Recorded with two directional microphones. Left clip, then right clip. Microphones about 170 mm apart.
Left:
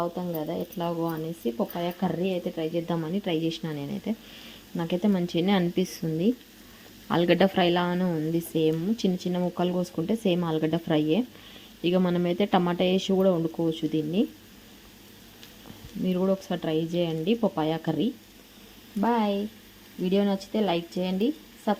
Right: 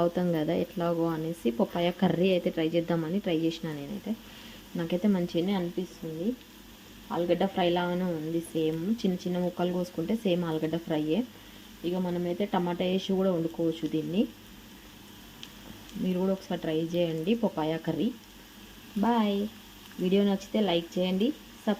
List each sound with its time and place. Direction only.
0.0 s speech: 20° right (ahead or behind)
0.8 s speech: 5° right (ahead or behind)
4.1 s speech: 25° left (ahead or behind)
7.1 s speech: 40° left (ahead or behind); by 11.2 s 25° left (ahead or behind)
11.8 s speech: 35° left (ahead or behind); by 14.3 s 20° left (ahead or behind)
16.0 s speech: 20° left (ahead or behind)